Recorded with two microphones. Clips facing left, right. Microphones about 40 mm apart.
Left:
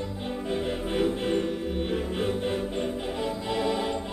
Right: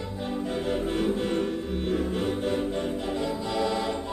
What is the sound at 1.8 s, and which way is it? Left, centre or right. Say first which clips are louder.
Music: right 3 dB; centre.